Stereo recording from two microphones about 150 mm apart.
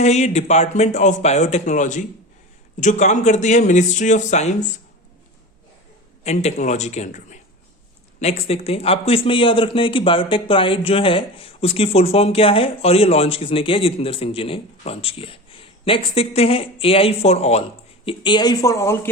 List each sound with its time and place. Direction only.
0.0 s a man's voice: 50° left (ahead or behind)
6.2 s a man's voice: 50° left (ahead or behind); by 19.1 s 20° left (ahead or behind)